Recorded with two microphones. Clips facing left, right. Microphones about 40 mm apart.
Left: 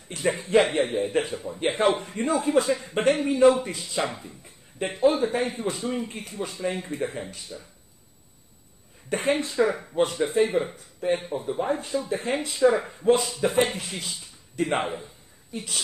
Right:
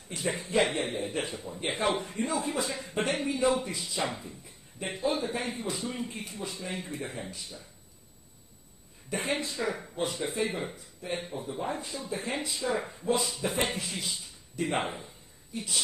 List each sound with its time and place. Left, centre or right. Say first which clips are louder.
0.1 s speech: left 8 dB; left
9.1 s speech: left 7 dB; left